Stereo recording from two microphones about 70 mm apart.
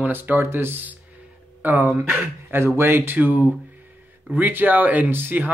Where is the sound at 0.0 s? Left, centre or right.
Right.